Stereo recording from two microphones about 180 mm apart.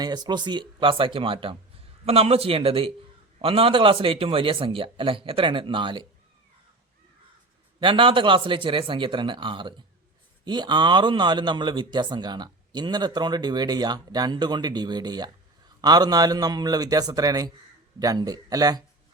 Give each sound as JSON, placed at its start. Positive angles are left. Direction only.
{"t": 0.0, "sound": "a man's voice", "side_deg": -20}
{"t": 7.8, "sound": "speech", "side_deg": -30}